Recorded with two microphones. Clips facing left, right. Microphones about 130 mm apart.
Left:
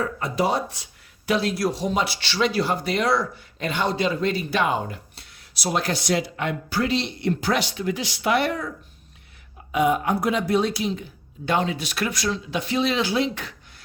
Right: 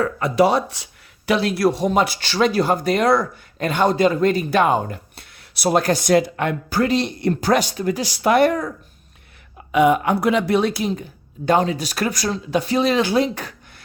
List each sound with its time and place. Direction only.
0.0 s speech: 70° right (ahead or behind)
1.3 s speech: 65° right (ahead or behind); by 8.7 s 45° right (ahead or behind)
9.7 s speech: 70° right (ahead or behind); by 13.5 s 40° right (ahead or behind)